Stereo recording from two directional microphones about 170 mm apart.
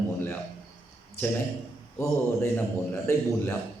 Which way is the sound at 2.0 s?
15° left (ahead or behind).